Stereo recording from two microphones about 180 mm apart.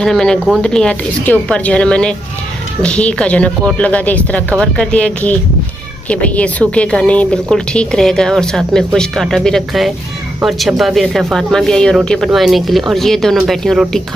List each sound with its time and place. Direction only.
0.0 s a woman's voice: 5° left (ahead or behind)